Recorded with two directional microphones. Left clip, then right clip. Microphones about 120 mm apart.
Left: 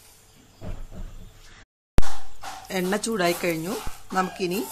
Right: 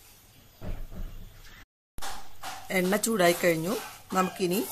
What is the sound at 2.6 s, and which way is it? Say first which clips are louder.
Speech: even; 15° right (ahead or behind).